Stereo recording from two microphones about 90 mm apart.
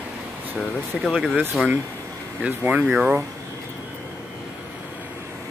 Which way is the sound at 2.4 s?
15° right (ahead or behind).